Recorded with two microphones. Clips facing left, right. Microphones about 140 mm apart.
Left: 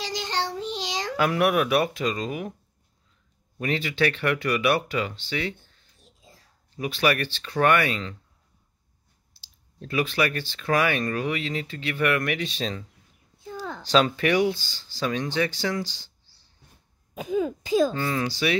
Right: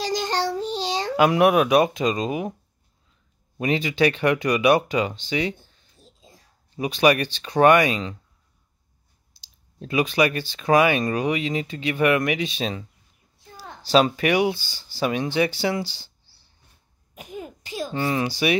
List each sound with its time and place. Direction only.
0.0 s child singing: 45° right (ahead or behind)
1.1 s speech: 20° right (ahead or behind)
3.5 s speech: 15° right (ahead or behind)
9.3 s speech: 15° right (ahead or behind)
13.8 s speech: 15° right (ahead or behind)
17.9 s speech: 15° right (ahead or behind)